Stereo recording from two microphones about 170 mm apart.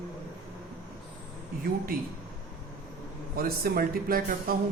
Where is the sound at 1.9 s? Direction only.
60° right (ahead or behind).